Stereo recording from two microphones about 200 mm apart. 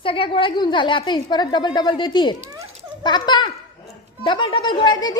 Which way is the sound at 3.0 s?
20° left (ahead or behind).